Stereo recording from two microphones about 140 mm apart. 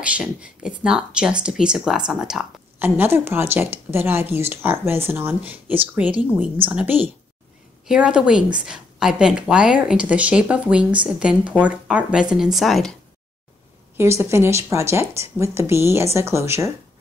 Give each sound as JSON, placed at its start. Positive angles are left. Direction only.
{"t": 0.0, "sound": "speech", "side_deg": -10}
{"t": 2.8, "sound": "speech", "side_deg": -15}
{"t": 13.9, "sound": "speech", "side_deg": -20}